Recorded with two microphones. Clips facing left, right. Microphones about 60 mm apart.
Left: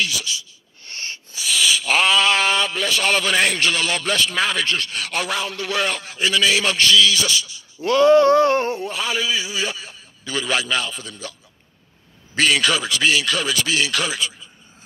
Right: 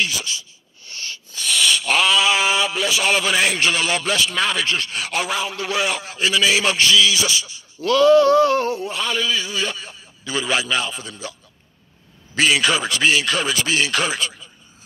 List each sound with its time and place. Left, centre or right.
0.0 s speech: right
0.8 s a sound: left
1.3 s a sound: centre
3.6 s a man's voice: centre
4.6 s a man's voice: centre
7.8 s a sound: left
8.9 s a man's voice: centre
10.2 s a man's voice: centre
12.4 s a man's voice: centre
12.8 s speech: right